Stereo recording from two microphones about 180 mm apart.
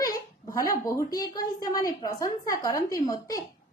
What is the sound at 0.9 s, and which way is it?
A woman's voice, 20° left (ahead or behind).